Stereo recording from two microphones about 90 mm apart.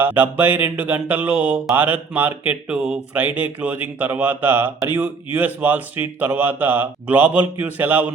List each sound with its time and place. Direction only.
0.0 s speech: 20° right (ahead or behind)